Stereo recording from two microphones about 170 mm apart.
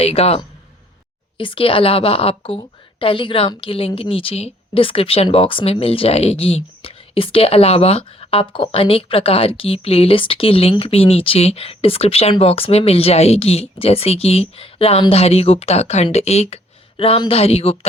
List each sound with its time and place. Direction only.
0.0 s a woman's voice: 35° left (ahead or behind)